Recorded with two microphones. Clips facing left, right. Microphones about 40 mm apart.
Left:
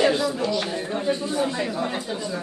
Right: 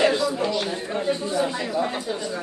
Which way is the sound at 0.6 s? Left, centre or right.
Centre.